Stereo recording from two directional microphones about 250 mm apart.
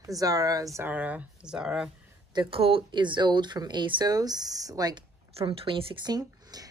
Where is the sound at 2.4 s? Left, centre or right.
Right.